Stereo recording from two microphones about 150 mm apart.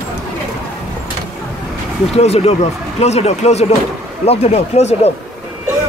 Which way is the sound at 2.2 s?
45° left (ahead or behind).